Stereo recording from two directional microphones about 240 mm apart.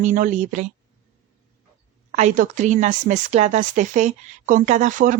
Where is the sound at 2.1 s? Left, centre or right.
Right.